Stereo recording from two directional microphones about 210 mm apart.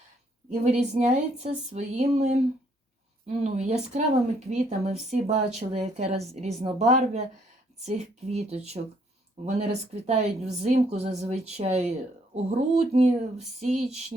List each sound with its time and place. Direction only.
0.6 s a woman's voice: 30° right (ahead or behind)